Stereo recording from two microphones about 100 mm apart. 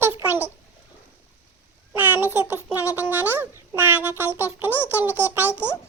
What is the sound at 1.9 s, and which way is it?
Child singing, 20° right (ahead or behind).